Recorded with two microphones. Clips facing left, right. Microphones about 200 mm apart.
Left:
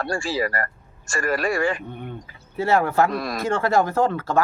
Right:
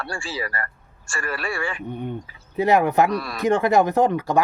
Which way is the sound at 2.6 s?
15° right (ahead or behind).